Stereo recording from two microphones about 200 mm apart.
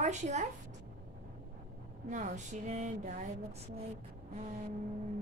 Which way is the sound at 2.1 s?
35° right (ahead or behind).